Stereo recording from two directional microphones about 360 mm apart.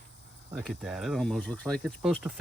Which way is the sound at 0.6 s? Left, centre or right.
Centre.